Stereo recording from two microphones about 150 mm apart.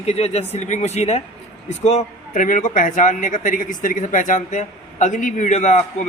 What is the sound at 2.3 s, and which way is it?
Speech, 60° left (ahead or behind).